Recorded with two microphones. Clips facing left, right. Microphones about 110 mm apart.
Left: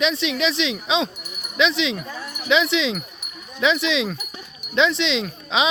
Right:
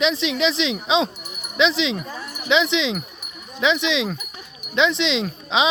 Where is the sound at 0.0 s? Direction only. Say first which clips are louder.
Right 1 dB; 25° right (ahead or behind).